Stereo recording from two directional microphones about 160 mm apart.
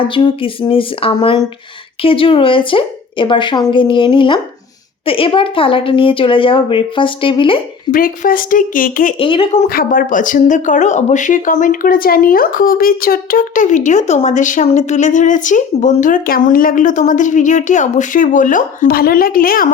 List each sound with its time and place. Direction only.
0.0 s a woman's voice: 30° left (ahead or behind)
7.9 s speech: 60° left (ahead or behind)
9.1 s a woman's voice: 35° left (ahead or behind)
9.6 s speech: 65° left (ahead or behind)